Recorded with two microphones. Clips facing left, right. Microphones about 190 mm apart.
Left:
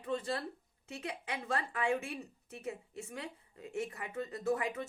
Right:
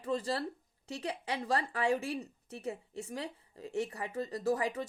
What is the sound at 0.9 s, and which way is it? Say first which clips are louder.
Speech: right 4 dB; 35° right (ahead or behind).